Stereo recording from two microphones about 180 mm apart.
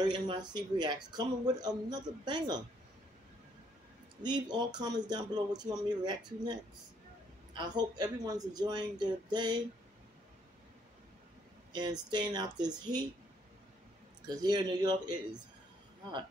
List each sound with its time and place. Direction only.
0.0 s speech: 25° right (ahead or behind)
4.2 s speech: 25° right (ahead or behind)
7.5 s speech: 25° right (ahead or behind)
11.7 s speech: 25° right (ahead or behind)
14.2 s speech: 20° right (ahead or behind)